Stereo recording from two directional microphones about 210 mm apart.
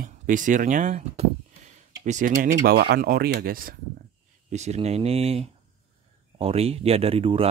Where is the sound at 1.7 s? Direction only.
35° right (ahead or behind).